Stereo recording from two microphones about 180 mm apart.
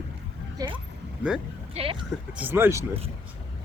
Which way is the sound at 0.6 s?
20° right (ahead or behind).